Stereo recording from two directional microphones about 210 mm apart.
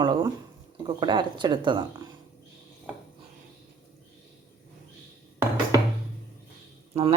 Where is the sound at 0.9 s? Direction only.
20° right (ahead or behind).